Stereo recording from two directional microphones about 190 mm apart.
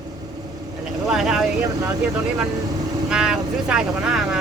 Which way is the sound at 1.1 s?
Centre (ahead or behind).